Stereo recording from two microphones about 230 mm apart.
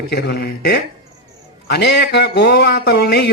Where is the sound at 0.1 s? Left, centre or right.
Left.